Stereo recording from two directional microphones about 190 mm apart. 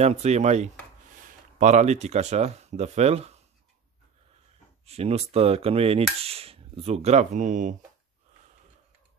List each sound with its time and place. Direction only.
0.0 s speech: 35° right (ahead or behind)
4.8 s speech: 35° right (ahead or behind)